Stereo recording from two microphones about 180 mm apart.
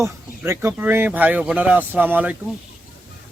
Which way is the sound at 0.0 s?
15° right (ahead or behind).